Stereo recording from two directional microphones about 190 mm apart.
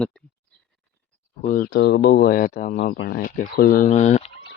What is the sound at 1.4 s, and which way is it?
Speech, 45° left (ahead or behind).